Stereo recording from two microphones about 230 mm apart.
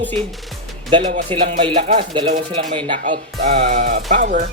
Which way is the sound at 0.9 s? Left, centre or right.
Right.